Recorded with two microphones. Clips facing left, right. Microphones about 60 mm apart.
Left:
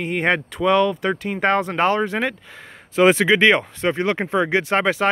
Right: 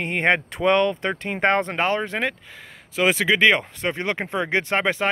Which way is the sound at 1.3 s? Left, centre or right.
Centre.